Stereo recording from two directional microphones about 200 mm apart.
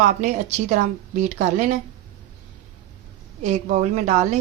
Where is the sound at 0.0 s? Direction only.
40° right (ahead or behind).